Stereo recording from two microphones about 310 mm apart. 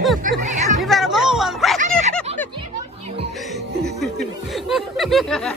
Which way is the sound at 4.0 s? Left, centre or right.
Centre.